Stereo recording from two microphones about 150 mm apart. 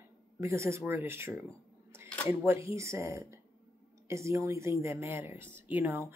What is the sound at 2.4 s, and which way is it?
Speech, 20° right (ahead or behind).